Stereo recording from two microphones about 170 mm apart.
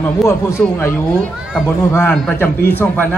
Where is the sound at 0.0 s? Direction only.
15° left (ahead or behind).